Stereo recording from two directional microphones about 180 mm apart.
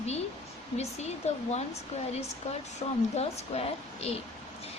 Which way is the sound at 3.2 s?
35° left (ahead or behind).